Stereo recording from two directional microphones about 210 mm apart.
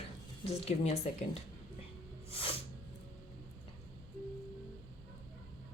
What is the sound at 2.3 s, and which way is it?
Music, 25° left (ahead or behind).